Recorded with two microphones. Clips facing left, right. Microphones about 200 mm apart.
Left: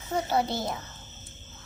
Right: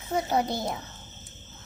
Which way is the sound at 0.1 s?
10° right (ahead or behind).